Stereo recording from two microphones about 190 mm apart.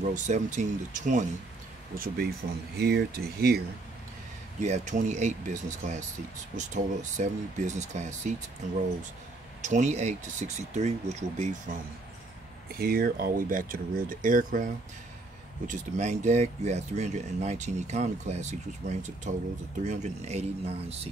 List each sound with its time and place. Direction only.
0.0 s speech: 40° right (ahead or behind)
2.0 s speech: 50° right (ahead or behind)
4.6 s speech: 40° right (ahead or behind)
12.7 s speech: 50° right (ahead or behind); by 21.1 s 30° right (ahead or behind)